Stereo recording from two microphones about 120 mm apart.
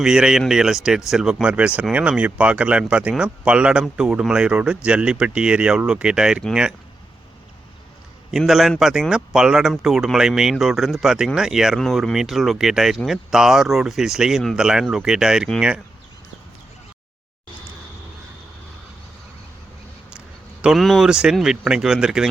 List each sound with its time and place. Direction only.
0.0 s a man's voice: 5° right (ahead or behind)
8.3 s a man's voice: centre (ahead or behind)
20.1 s speech: 5° right (ahead or behind)